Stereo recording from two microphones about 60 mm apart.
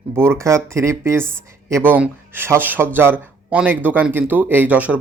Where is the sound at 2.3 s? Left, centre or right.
Right.